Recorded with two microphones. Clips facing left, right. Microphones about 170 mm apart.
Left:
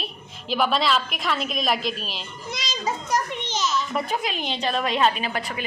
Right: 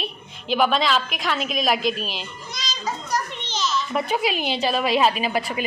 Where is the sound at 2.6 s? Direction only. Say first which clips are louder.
Left 1 dB; 25° left (ahead or behind).